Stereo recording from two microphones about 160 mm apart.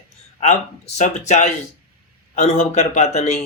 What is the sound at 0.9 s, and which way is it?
Speech, 45° left (ahead or behind).